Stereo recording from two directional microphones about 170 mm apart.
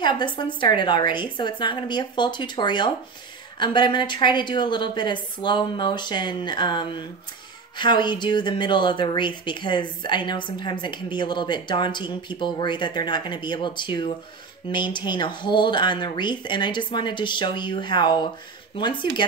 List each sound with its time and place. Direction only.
0.0 s a woman's voice: 25° left (ahead or behind)